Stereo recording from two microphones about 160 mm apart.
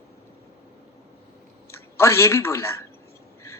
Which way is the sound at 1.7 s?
15° left (ahead or behind).